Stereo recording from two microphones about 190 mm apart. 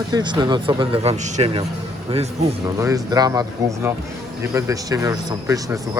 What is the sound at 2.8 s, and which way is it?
Speech, 15° right (ahead or behind).